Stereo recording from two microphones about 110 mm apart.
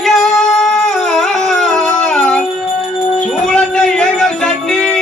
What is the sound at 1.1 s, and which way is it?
Howl, 5° left (ahead or behind).